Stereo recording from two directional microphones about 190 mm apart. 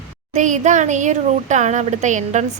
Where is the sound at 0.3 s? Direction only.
40° right (ahead or behind).